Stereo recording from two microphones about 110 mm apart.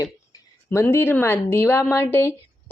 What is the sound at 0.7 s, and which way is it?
Speech, 20° left (ahead or behind).